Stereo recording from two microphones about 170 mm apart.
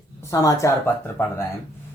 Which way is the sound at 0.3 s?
20° left (ahead or behind).